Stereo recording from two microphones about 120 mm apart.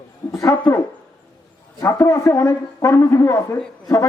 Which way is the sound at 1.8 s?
30° left (ahead or behind).